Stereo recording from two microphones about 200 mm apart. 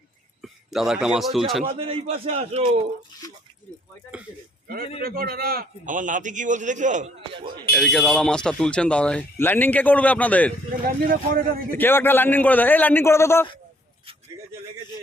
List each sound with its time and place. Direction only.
0.4 s a man's voice: centre (ahead or behind)
1.6 s a man's voice: 25° right (ahead or behind)
5.0 s a man's voice: 50° right (ahead or behind)
7.3 s a man's voice: 25° right (ahead or behind)
7.6 s speech: 5° left (ahead or behind)
11.0 s a man's voice: 45° right (ahead or behind)
11.7 s a man's voice: 10° left (ahead or behind)